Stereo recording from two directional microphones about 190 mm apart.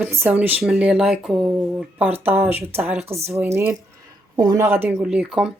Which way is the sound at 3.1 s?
35° right (ahead or behind).